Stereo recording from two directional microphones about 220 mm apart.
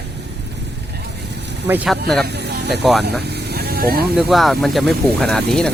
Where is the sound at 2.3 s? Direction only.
50° right (ahead or behind).